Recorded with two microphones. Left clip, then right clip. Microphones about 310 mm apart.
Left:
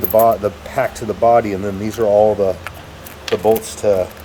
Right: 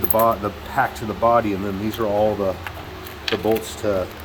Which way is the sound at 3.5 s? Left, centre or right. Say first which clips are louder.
Left 5 dB; centre.